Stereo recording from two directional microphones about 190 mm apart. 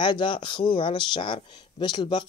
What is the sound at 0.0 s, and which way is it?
Speech, 25° left (ahead or behind).